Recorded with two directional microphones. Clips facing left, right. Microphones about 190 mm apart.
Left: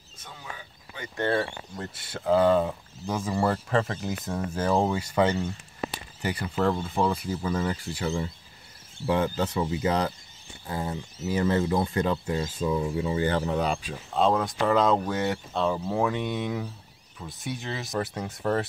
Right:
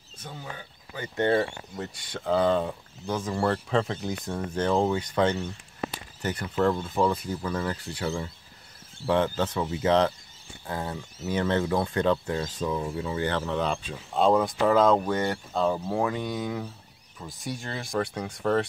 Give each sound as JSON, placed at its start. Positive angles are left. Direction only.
{"t": 0.2, "sound": "speech", "side_deg": -50}
{"t": 0.9, "sound": "speech", "side_deg": -25}
{"t": 1.8, "sound": "speech", "side_deg": 5}
{"t": 14.1, "sound": "speech", "side_deg": 0}